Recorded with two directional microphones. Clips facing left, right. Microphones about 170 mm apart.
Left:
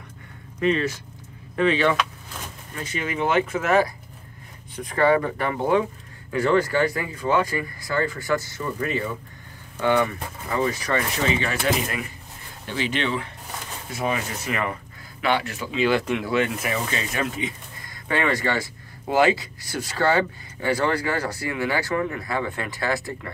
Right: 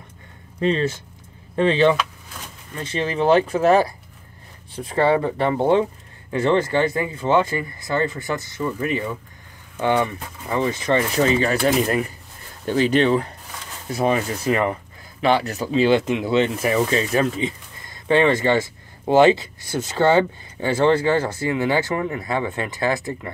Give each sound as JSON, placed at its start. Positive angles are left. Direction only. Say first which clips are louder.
{"t": 0.6, "sound": "speech", "louder": "right 2 dB", "side_deg": -30}
{"t": 11.2, "sound": "speech", "louder": "right 3 dB", "side_deg": -40}
{"t": 15.9, "sound": "speech", "louder": "right 4 dB", "side_deg": -20}